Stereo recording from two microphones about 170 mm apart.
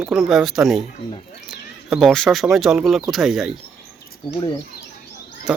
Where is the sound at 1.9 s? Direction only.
Centre (ahead or behind).